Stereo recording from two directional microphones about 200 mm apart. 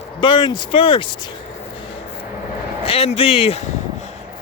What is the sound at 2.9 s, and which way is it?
Speech, 30° left (ahead or behind).